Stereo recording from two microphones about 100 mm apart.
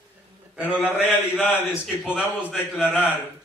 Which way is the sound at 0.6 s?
15° right (ahead or behind).